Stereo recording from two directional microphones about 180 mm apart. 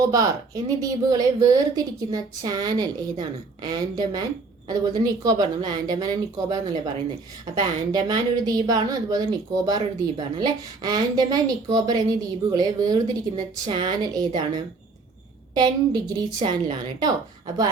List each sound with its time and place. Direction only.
0.0 s a woman's voice: 20° right (ahead or behind)